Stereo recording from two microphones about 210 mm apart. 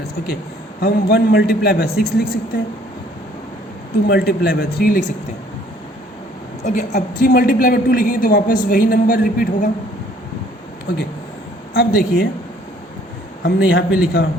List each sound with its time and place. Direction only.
0.8 s a man's voice: 45° left (ahead or behind)
4.0 s a man's voice: 50° left (ahead or behind)
6.7 s a woman's voice: 35° left (ahead or behind)
11.7 s a man's voice: 50° left (ahead or behind)
13.4 s a man's voice: 50° left (ahead or behind)